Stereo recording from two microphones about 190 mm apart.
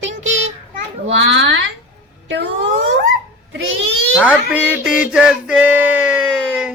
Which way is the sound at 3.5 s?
90° right.